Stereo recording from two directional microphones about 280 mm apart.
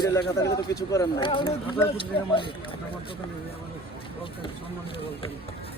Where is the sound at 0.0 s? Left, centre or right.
Centre.